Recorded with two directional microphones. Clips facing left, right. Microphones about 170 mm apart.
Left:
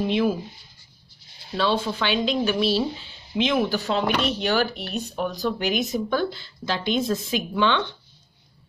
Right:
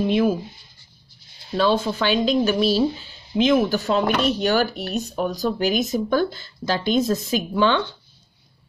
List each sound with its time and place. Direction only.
1.6 s speech: 45° right (ahead or behind)